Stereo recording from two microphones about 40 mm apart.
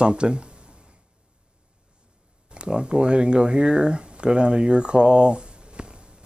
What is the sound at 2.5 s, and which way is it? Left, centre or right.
Speech, right.